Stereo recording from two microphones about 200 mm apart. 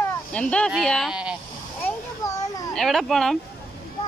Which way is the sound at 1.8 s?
15° left (ahead or behind).